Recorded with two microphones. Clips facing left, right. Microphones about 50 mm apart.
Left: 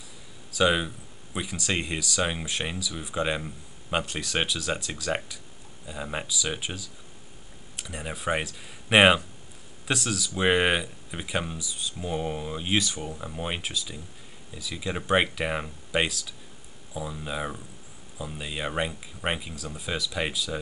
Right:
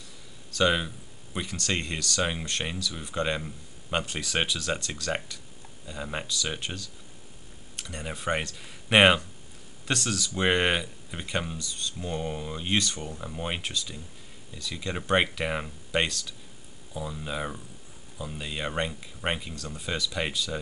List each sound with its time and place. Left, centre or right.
0.5 s speech: centre